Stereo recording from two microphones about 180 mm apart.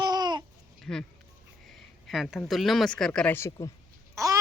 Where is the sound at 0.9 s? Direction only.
5° left (ahead or behind).